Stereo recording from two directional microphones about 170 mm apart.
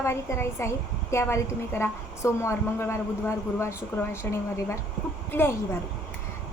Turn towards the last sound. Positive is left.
turn(degrees=15)  # may be behind; listen again after turning